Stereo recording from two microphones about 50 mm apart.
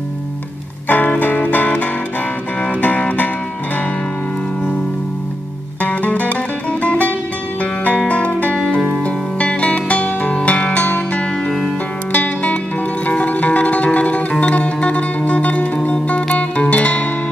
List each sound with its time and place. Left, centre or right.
0.8 s music: left
5.8 s music: left
12.1 s music: left